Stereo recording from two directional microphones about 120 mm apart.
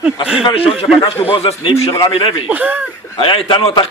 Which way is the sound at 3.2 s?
45° left (ahead or behind).